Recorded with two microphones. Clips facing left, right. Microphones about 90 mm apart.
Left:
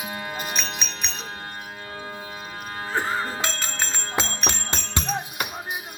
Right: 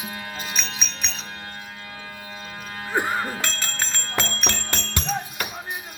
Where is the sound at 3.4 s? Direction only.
15° left (ahead or behind).